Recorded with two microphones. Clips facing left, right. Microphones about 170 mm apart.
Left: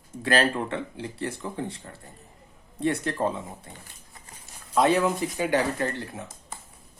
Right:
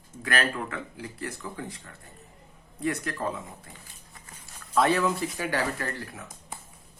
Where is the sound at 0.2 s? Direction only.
30° left (ahead or behind).